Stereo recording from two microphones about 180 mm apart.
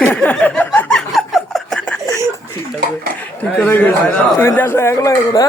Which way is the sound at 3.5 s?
10° left (ahead or behind).